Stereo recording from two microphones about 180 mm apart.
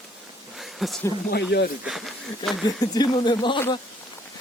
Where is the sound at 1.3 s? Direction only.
65° left (ahead or behind).